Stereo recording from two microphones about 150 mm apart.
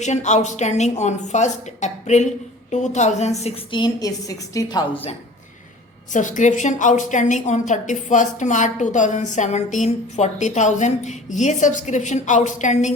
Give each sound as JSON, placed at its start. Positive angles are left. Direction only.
{"t": 0.0, "sound": "a woman's voice", "side_deg": 50}
{"t": 3.7, "sound": "a woman's voice", "side_deg": 30}
{"t": 6.1, "sound": "a woman's voice", "side_deg": 55}